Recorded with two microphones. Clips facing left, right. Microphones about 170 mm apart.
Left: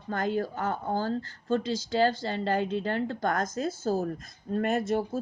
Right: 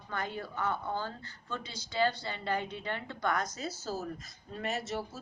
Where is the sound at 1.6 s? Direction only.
90° left.